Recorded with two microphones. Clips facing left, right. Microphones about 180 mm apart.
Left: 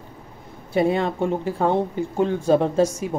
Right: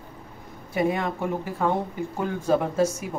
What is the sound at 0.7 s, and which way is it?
Speech, 30° left (ahead or behind).